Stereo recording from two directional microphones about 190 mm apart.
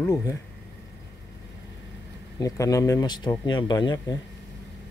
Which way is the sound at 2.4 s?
20° left (ahead or behind).